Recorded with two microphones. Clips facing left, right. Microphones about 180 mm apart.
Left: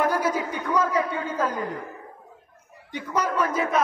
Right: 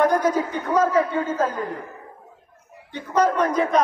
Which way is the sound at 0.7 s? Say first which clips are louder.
Right 4 dB; 40° right (ahead or behind).